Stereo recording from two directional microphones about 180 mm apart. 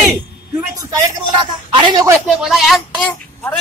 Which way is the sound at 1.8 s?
25° right (ahead or behind).